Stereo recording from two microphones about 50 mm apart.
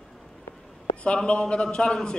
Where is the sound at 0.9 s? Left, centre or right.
Left.